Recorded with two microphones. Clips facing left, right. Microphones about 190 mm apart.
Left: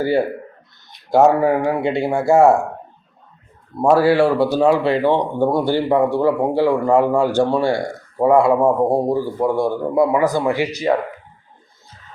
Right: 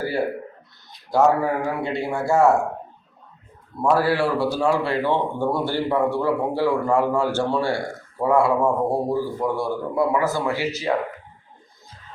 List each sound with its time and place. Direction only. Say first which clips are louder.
1.1 s a man's voice: left 5 dB; 25° left (ahead or behind)
3.9 s speech: left 7 dB; 25° left (ahead or behind)